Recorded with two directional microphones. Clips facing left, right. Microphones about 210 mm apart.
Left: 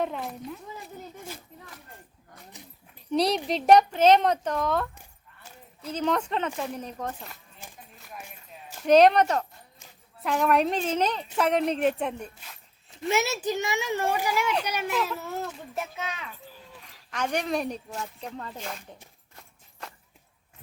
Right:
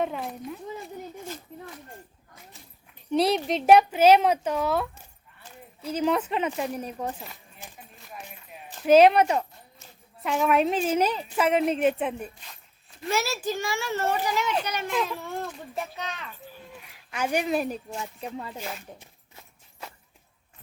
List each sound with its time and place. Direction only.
0.0 s speech: centre (ahead or behind)
2.5 s dog: 15° left (ahead or behind)
3.1 s a woman's voice: centre (ahead or behind)
7.6 s a sound: 5° left (ahead or behind)
8.9 s a woman's voice: 5° right (ahead or behind)
13.1 s a woman's voice: 20° left (ahead or behind)
17.1 s a woman's voice: 5° right (ahead or behind)